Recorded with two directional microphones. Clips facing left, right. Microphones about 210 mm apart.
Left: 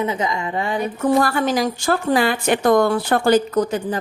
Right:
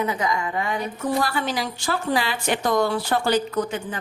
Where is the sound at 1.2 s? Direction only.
50° left (ahead or behind).